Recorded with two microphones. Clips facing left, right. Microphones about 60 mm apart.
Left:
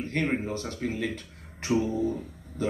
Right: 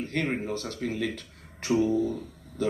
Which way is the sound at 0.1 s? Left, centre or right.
Centre.